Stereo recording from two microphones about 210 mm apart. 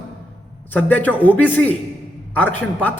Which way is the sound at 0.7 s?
10° left (ahead or behind).